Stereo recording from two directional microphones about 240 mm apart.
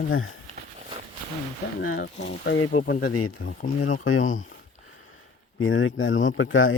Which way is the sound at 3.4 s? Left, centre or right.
Left.